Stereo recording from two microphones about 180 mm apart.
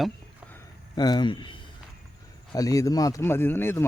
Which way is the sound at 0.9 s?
25° left (ahead or behind).